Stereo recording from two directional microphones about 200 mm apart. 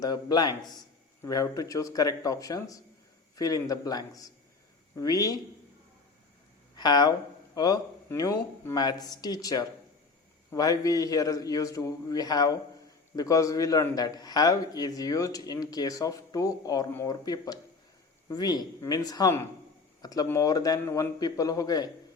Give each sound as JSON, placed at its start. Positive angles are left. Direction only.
{"t": 0.0, "sound": "a man's voice", "side_deg": 20}
{"t": 6.7, "sound": "a man's voice", "side_deg": 20}